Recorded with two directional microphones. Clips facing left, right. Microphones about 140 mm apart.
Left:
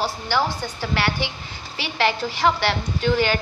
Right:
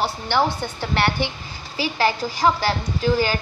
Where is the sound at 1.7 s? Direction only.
40° right (ahead or behind).